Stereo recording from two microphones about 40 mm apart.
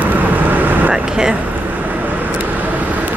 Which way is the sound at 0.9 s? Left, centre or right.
Centre.